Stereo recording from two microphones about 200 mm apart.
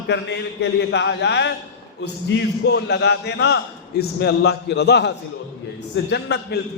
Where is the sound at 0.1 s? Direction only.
60° left (ahead or behind).